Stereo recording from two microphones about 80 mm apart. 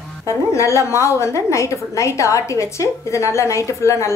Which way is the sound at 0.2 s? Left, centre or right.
Left.